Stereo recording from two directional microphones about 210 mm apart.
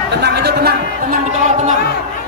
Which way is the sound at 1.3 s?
35° right (ahead or behind).